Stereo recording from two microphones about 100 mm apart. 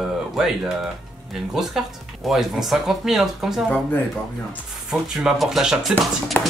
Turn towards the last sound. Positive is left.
turn(degrees=0)  # may be behind; listen again after turning